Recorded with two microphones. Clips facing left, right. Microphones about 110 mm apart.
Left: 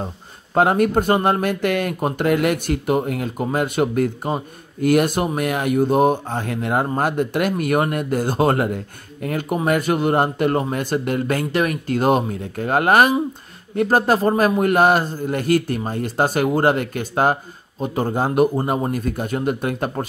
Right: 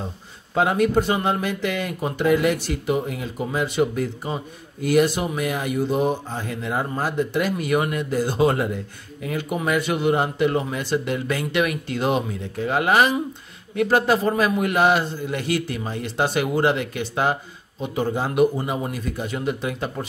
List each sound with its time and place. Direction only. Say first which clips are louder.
0.6 s speech: left 3 dB; 50° left (ahead or behind)